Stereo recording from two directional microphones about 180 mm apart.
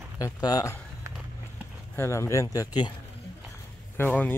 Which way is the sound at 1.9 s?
15° left (ahead or behind).